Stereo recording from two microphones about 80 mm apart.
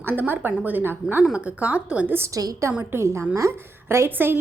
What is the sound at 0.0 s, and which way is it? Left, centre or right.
A woman's voice, right.